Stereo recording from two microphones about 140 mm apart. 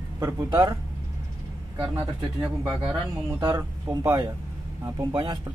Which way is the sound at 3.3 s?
30° right (ahead or behind).